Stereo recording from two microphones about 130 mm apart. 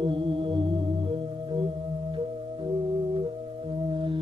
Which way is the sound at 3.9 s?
40° right (ahead or behind).